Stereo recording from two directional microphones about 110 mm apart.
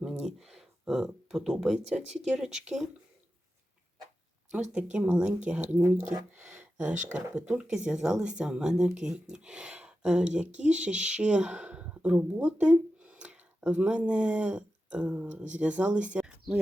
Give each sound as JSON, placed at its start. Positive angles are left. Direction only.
{"t": 0.0, "sound": "speech", "side_deg": -5}
{"t": 4.7, "sound": "a woman's voice", "side_deg": -10}